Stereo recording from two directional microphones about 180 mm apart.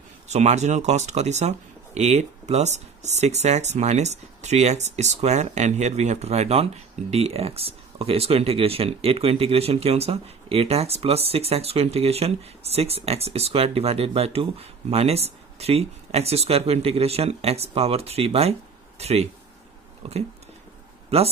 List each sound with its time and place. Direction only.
0.3 s speech: 40° right (ahead or behind)